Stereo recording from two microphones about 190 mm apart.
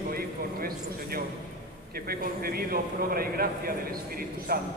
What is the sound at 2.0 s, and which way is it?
A man's voice, 50° right (ahead or behind).